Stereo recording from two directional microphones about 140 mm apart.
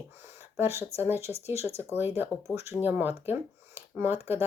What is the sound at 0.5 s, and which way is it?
Speech, 20° right (ahead or behind).